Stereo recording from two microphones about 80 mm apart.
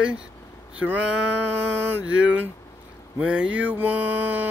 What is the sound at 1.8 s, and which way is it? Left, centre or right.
Music, centre.